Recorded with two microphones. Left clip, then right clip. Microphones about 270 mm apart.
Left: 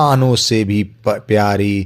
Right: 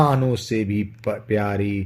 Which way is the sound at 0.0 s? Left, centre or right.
Left.